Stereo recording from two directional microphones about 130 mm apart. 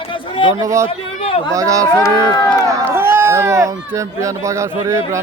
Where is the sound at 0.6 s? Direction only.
25° right (ahead or behind).